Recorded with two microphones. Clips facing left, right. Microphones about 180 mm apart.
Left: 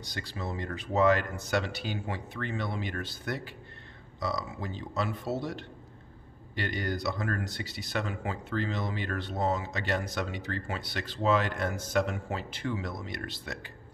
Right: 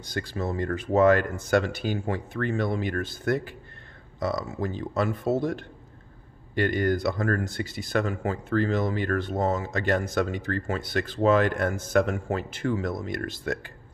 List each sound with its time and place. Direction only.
0.0 s speech: 50° right (ahead or behind)